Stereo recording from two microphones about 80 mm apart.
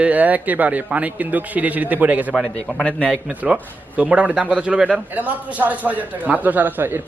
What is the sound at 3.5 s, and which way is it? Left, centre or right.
Speech, centre.